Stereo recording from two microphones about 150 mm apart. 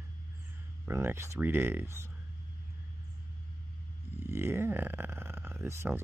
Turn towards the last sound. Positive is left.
turn(degrees=-15)  # may be behind; listen again after turning